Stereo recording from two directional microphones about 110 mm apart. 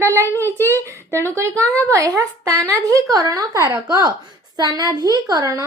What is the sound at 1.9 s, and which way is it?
A woman's voice, 30° right (ahead or behind).